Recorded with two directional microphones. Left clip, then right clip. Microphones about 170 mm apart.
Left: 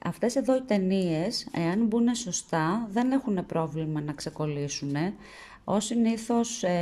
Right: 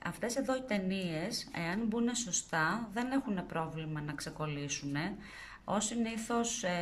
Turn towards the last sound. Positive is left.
turn(degrees=25)  # may be behind; listen again after turning